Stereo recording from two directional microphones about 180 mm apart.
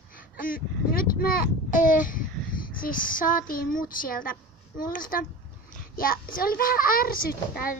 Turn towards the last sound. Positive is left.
turn(degrees=55)  # may be behind; listen again after turning